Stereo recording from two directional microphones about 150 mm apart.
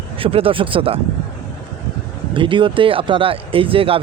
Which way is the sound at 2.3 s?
35° right (ahead or behind).